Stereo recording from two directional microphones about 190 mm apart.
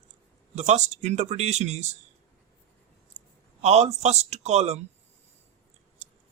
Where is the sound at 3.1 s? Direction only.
35° right (ahead or behind).